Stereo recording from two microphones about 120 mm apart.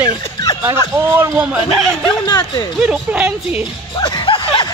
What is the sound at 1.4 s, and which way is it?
Speech, 5° right (ahead or behind).